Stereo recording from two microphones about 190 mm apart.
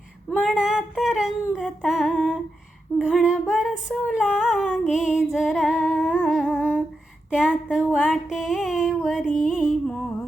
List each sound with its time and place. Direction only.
0.4 s female singing: centre (ahead or behind)